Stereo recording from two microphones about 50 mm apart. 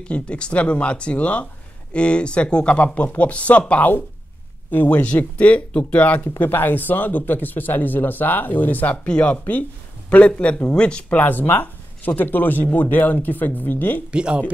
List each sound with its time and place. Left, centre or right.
0.1 s speech: left
4.6 s speech: left
5.1 s speech: left
14.1 s speech: centre